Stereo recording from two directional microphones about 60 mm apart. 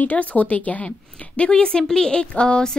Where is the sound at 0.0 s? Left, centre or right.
Left.